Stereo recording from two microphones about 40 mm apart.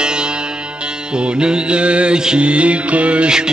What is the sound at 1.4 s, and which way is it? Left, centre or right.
Mantra, right.